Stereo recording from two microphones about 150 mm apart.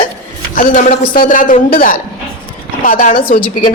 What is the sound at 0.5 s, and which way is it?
A woman's voice, 60° left (ahead or behind).